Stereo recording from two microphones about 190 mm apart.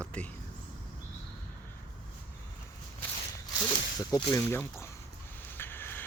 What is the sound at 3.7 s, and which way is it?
Speech, 25° left (ahead or behind).